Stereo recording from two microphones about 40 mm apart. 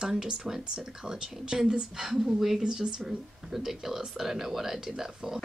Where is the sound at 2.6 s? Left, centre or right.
Right.